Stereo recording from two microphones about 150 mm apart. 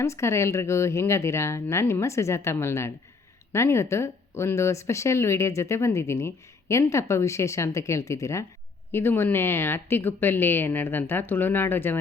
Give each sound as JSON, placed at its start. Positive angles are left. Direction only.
{"t": 0.0, "sound": "speech", "side_deg": 20}